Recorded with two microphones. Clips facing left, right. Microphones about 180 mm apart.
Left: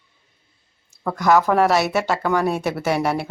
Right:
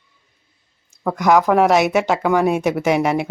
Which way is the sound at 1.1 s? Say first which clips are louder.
Right 2 dB; 15° right (ahead or behind).